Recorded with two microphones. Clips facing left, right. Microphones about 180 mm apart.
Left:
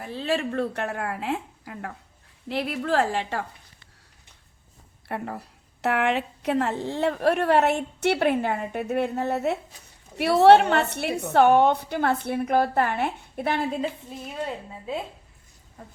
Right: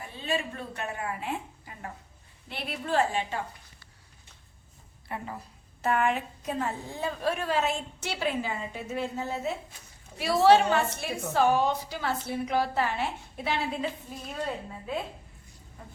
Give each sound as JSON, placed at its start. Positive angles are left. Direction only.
{"t": 0.0, "sound": "a woman's voice", "side_deg": 80}
{"t": 2.5, "sound": "a woman's voice", "side_deg": 90}
{"t": 5.0, "sound": "a woman's voice", "side_deg": 65}